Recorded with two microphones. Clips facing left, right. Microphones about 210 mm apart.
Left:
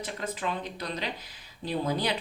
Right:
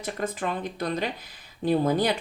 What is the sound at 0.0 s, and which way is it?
A woman's voice, 50° right (ahead or behind).